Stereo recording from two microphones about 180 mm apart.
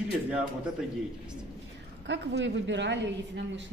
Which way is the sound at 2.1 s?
80° right.